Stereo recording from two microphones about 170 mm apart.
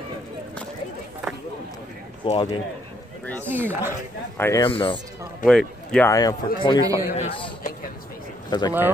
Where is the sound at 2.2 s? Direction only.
25° left (ahead or behind).